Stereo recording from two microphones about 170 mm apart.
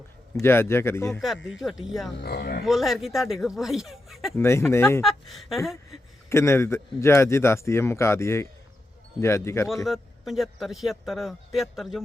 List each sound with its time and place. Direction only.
0.3 s speech: 15° left (ahead or behind)
1.5 s a man's voice: centre (ahead or behind)
2.1 s speech: 65° left (ahead or behind)
2.6 s a man's voice: centre (ahead or behind)
4.4 s speech: 15° left (ahead or behind)
5.0 s a man's voice: centre (ahead or behind)
6.2 s speech: 15° left (ahead or behind)
9.8 s a man's voice: centre (ahead or behind)